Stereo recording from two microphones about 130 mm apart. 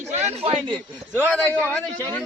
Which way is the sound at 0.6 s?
5° left (ahead or behind).